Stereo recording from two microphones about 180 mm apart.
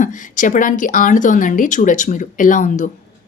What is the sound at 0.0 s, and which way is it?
A woman's voice, 45° left (ahead or behind).